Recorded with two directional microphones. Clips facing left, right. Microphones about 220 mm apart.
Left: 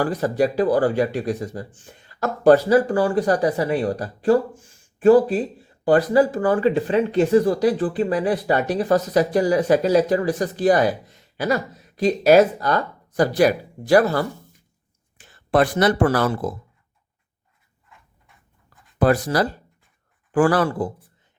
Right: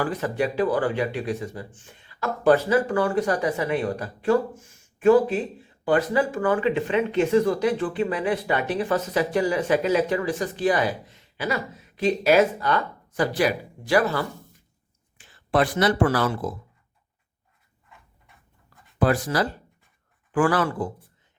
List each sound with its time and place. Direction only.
0.0 s speech: 40° left (ahead or behind)
18.9 s speech: 40° left (ahead or behind)